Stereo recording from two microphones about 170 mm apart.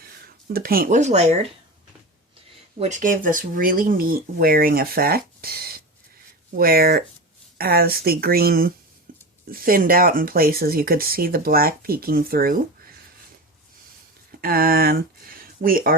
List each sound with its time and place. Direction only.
0.4 s speech: 60° right (ahead or behind); by 1.5 s 40° right (ahead or behind)
2.7 s speech: 40° right (ahead or behind); by 8.7 s 60° right (ahead or behind)
9.1 s a sound: 55° right (ahead or behind)
9.5 s speech: 60° right (ahead or behind)
14.4 s speech: 60° right (ahead or behind)